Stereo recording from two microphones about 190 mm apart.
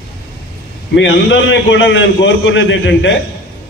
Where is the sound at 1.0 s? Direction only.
75° left (ahead or behind).